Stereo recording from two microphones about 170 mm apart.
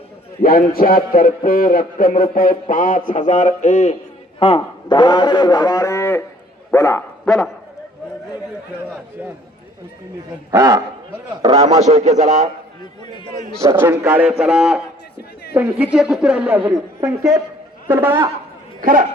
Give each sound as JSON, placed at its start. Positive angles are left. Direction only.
{"t": 0.4, "sound": "a man's voice", "side_deg": 60}
{"t": 4.4, "sound": "a man's voice", "side_deg": 35}
{"t": 6.7, "sound": "dog", "side_deg": 15}
{"t": 10.5, "sound": "a man's voice", "side_deg": -15}
{"t": 11.9, "sound": "speech", "side_deg": -45}
{"t": 13.1, "sound": "a man's voice", "side_deg": 25}
{"t": 13.6, "sound": "speech", "side_deg": -15}
{"t": 18.8, "sound": "speech", "side_deg": -50}